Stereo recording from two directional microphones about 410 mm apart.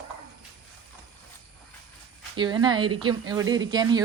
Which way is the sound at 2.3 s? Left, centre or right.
Centre.